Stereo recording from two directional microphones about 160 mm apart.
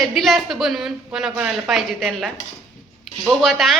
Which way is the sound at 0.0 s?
Centre (ahead or behind).